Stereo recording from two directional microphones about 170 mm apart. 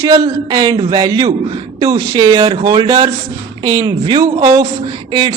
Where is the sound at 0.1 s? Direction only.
25° right (ahead or behind).